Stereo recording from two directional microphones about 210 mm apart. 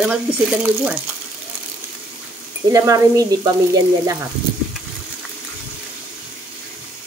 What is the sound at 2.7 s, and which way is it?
Speech, 15° right (ahead or behind).